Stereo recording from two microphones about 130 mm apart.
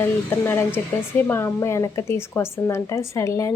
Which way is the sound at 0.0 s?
20° left (ahead or behind).